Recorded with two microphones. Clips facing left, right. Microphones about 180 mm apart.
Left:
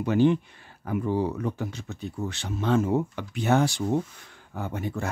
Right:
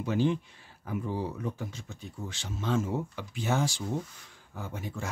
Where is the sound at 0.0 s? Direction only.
65° left (ahead or behind).